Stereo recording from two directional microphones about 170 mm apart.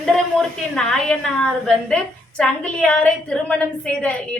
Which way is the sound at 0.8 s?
5° left (ahead or behind).